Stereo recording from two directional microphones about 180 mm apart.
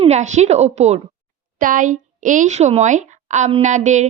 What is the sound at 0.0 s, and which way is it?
A woman's voice, 40° right (ahead or behind).